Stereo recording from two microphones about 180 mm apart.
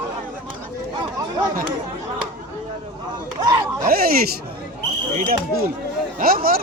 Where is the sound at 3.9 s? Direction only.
55° right (ahead or behind).